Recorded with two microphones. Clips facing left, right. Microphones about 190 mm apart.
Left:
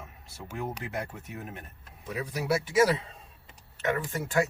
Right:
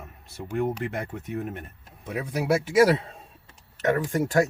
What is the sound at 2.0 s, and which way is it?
Speech, 55° right (ahead or behind).